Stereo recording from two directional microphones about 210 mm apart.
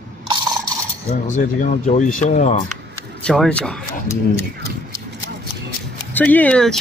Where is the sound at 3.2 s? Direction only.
5° left (ahead or behind).